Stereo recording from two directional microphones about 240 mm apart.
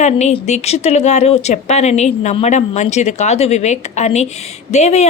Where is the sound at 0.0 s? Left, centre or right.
Left.